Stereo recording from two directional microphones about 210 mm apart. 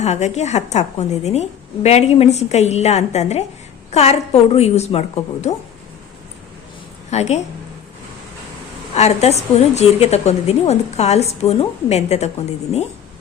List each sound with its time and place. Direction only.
0.0 s a woman's voice: 30° left (ahead or behind)
7.1 s a woman's voice: 30° left (ahead or behind)
9.0 s a woman's voice: 30° left (ahead or behind)